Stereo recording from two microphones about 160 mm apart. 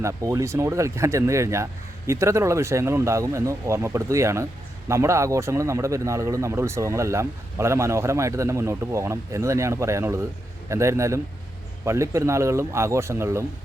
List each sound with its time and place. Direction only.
0.0 s speech: 20° right (ahead or behind)